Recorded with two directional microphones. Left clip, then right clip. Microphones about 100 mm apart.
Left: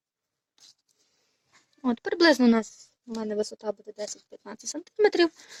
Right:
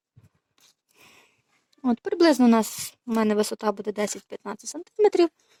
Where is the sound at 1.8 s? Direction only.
15° right (ahead or behind).